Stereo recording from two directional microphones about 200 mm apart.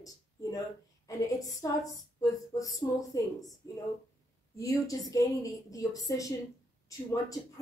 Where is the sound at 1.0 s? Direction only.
15° left (ahead or behind).